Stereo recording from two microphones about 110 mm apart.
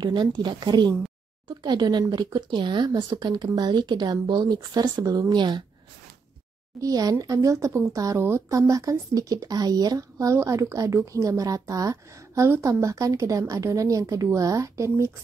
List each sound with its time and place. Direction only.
0.0 s speech: 40° right (ahead or behind)
6.8 s speech: 35° right (ahead or behind)